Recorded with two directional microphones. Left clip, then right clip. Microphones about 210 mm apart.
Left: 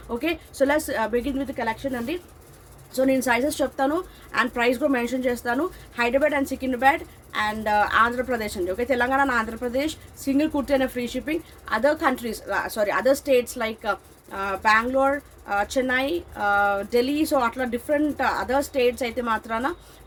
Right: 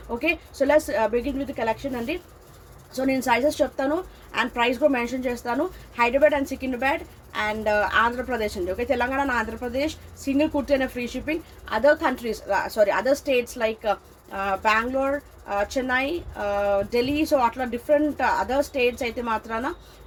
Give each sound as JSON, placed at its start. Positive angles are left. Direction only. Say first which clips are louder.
{"t": 0.2, "sound": "a woman's voice", "louder": "even", "side_deg": 15}